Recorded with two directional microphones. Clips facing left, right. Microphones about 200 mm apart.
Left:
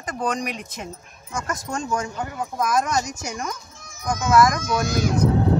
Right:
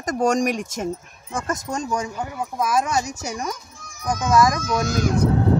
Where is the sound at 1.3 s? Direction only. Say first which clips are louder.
Right 2 dB; 25° right (ahead or behind).